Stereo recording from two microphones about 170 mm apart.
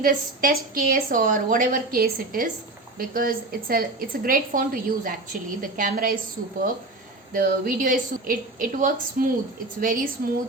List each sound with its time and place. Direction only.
0.0 s a woman's voice: 55° right (ahead or behind)
7.3 s a woman's voice: 55° right (ahead or behind)